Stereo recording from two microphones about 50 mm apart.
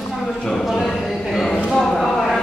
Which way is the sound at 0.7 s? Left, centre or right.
Centre.